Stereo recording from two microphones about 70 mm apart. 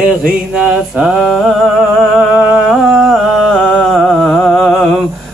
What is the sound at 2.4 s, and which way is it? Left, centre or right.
Humming, right.